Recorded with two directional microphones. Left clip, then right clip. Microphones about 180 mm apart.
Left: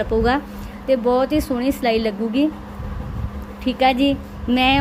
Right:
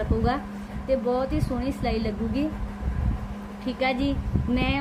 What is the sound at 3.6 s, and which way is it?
A woman's voice, 45° left (ahead or behind).